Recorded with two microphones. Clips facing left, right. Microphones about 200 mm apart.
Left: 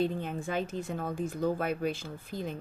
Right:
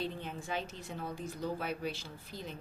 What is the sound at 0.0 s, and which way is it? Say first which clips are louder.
Speech: left 8 dB; 50° left (ahead or behind).